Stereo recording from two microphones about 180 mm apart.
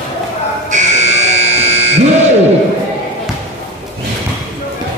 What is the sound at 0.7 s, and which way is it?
Buzzer, 40° right (ahead or behind).